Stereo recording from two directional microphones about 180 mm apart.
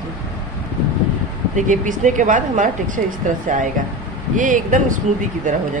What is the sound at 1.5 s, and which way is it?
A woman's voice, 45° right (ahead or behind).